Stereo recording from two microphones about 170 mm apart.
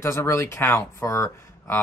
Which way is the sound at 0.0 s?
15° left (ahead or behind).